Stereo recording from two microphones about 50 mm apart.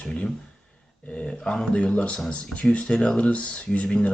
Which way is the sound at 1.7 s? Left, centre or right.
Left.